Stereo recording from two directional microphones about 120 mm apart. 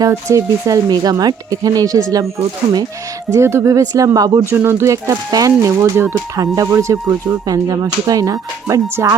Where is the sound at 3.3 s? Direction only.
25° right (ahead or behind).